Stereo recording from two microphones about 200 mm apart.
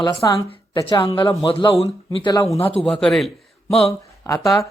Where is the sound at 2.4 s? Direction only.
30° left (ahead or behind).